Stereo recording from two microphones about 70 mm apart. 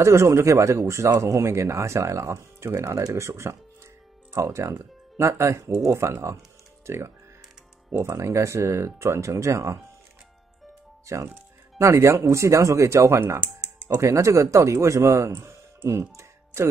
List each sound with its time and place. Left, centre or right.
0.0 s speech: right
8.0 s speech: right
11.1 s speech: right